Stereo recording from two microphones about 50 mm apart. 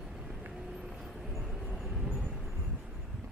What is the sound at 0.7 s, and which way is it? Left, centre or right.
Vehicle, centre.